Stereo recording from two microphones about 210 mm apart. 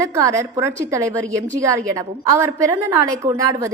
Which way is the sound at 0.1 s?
15° right (ahead or behind).